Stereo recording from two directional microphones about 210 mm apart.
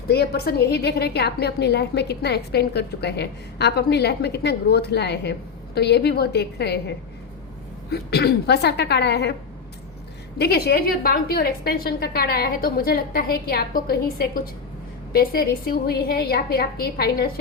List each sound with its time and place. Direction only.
0.1 s a woman's voice: 50° left (ahead or behind)
10.3 s a woman's voice: 50° left (ahead or behind)